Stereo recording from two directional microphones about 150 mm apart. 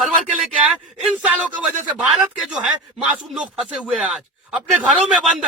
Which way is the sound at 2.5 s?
5° right (ahead or behind).